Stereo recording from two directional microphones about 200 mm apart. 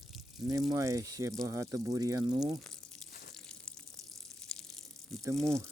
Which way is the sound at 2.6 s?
Centre (ahead or behind).